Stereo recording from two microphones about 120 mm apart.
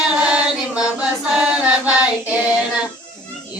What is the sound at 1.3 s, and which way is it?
Choir, 10° right (ahead or behind).